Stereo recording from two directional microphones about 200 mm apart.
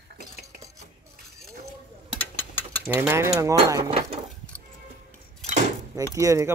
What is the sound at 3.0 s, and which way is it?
Speech, 10° right (ahead or behind).